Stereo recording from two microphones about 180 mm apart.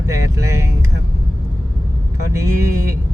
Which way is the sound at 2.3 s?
15° right (ahead or behind).